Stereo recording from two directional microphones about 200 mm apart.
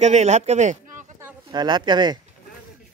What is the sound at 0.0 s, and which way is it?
Speech, 35° right (ahead or behind).